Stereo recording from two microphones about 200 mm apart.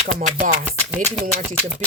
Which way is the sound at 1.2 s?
40° right (ahead or behind).